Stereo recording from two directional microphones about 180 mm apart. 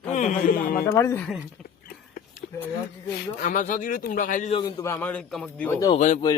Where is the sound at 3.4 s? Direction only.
45° left (ahead or behind).